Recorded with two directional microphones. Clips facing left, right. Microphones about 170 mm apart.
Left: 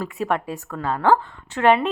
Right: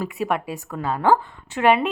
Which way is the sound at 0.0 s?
10° right (ahead or behind).